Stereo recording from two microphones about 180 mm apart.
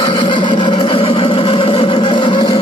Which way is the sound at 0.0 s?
25° left (ahead or behind).